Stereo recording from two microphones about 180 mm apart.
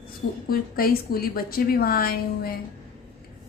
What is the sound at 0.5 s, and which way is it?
A woman's voice, 55° left (ahead or behind).